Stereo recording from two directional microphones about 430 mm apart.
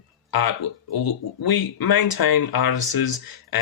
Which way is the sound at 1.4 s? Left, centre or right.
Left.